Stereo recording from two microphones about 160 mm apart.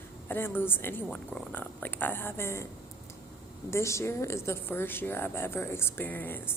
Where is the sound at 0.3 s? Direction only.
15° left (ahead or behind).